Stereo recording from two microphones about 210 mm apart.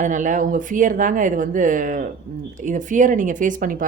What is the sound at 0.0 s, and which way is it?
Speech, 35° right (ahead or behind).